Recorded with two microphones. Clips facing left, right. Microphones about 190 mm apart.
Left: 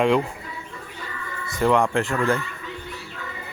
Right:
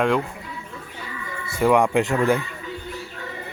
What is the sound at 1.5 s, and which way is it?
Speech, 10° right (ahead or behind).